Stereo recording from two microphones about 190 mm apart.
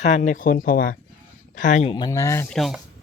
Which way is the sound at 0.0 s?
40° left (ahead or behind).